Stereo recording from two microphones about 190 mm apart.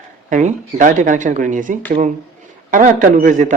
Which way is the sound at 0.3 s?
40° right (ahead or behind).